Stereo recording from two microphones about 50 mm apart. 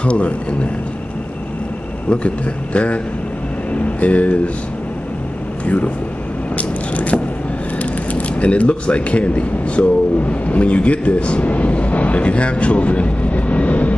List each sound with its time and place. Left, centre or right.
0.0 s a man's voice: left
2.0 s a man's voice: left
6.5 s crushing: left
7.8 s speech: left